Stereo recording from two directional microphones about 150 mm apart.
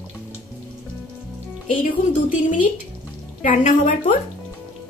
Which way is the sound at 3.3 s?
60° left (ahead or behind).